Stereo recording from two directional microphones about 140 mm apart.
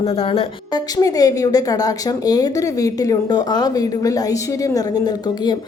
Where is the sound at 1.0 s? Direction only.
25° left (ahead or behind).